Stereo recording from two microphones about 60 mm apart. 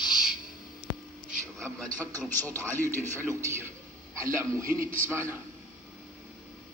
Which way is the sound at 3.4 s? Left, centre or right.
Right.